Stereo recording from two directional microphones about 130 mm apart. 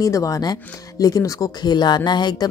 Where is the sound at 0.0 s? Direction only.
25° left (ahead or behind).